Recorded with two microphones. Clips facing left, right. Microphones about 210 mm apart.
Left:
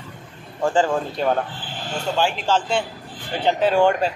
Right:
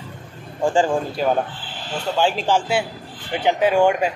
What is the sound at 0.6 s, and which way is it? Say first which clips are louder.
A man's voice: right 1 dB; 15° right (ahead or behind).